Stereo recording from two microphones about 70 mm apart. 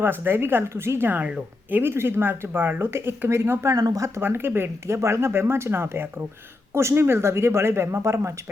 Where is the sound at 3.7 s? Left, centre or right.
Right.